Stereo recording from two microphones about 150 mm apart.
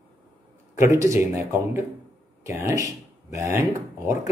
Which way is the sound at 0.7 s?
20° right (ahead or behind).